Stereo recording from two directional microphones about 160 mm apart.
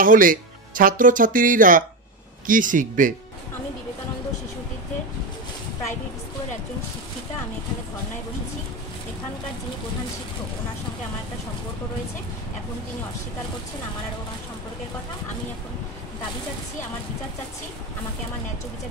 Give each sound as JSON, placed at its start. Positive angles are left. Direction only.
{"t": 0.0, "sound": "speech", "side_deg": -60}